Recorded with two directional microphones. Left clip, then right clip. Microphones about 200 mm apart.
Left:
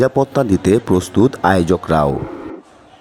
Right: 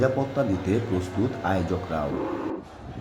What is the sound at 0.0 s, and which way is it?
Speech, 55° left (ahead or behind).